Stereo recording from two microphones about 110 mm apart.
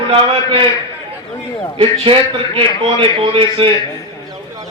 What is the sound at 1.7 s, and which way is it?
A man's voice, 55° right (ahead or behind).